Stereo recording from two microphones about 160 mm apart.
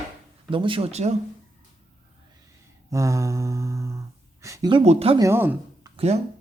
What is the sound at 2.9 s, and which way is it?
Speech, 20° right (ahead or behind).